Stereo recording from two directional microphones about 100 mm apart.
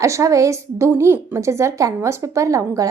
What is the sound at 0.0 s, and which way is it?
A woman's voice, 30° right (ahead or behind).